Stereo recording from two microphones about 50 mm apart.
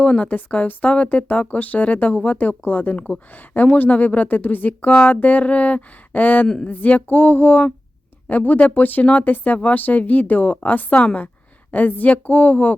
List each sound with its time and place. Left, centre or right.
0.0 s speech: left